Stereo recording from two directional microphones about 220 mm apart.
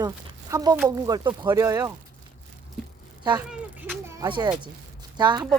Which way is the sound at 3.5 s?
5° right (ahead or behind).